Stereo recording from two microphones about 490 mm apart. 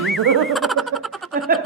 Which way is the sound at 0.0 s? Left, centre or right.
Centre.